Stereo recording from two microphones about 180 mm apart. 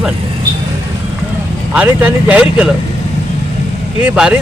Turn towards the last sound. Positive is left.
turn(degrees=-5)  # may be behind; listen again after turning